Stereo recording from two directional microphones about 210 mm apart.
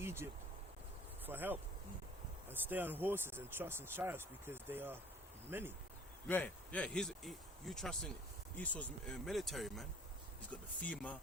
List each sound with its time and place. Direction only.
0.0 s a sound: 10° right (ahead or behind)
1.3 s speech: 10° right (ahead or behind)
6.2 s speech: 5° left (ahead or behind)